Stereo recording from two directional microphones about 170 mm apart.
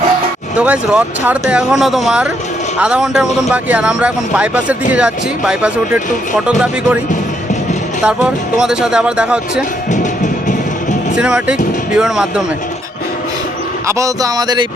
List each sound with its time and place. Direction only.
0.6 s speech: 10° right (ahead or behind)
8.0 s speech: 5° right (ahead or behind)
11.2 s speech: 5° right (ahead or behind)
13.8 s speech: 20° right (ahead or behind)